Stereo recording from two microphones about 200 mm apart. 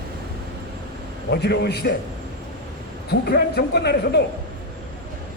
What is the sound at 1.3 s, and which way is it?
Speech, 55° left (ahead or behind).